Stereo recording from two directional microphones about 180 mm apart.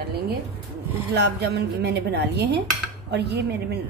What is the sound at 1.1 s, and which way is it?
Speech, 65° right (ahead or behind).